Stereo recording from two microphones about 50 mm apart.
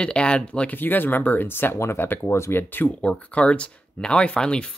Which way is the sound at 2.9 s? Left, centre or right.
Left.